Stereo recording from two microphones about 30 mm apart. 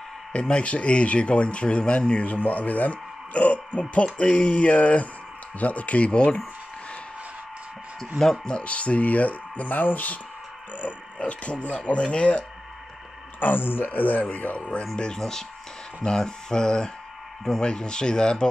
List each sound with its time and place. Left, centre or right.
0.3 s speech: left
6.1 s speech: left
8.6 s speech: left
11.1 s speech: left
13.4 s speech: left
15.1 s speech: centre